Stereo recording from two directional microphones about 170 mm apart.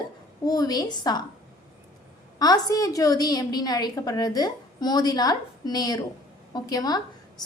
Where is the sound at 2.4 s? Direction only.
20° left (ahead or behind).